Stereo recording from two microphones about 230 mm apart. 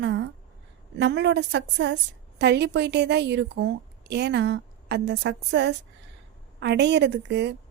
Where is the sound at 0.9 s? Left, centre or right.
Right.